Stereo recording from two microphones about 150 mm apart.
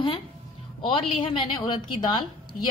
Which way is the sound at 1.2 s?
35° left (ahead or behind).